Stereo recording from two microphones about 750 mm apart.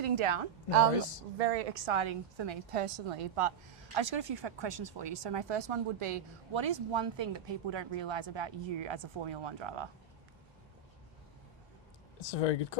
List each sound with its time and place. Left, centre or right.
0.0 s a woman's voice: right
1.4 s a woman's voice: right
12.2 s speech: left